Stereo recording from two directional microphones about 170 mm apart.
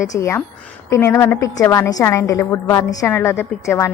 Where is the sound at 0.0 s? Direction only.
15° left (ahead or behind).